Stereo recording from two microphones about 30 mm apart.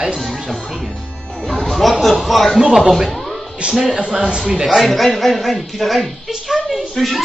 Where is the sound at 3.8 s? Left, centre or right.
Centre.